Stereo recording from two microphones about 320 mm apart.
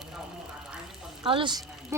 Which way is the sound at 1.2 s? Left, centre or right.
Centre.